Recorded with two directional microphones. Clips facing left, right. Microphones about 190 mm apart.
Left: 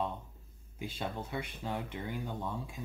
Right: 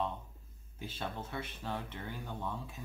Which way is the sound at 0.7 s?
15° left (ahead or behind).